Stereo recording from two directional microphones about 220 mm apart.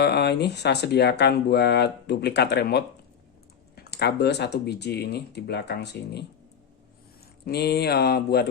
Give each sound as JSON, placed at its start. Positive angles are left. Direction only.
{"t": 0.0, "sound": "speech", "side_deg": 50}
{"t": 7.4, "sound": "speech", "side_deg": 45}